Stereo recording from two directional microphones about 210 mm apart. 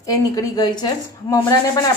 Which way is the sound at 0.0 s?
15° left (ahead or behind).